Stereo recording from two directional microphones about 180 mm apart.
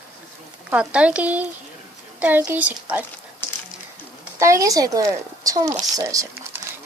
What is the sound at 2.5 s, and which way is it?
Speech, 10° right (ahead or behind).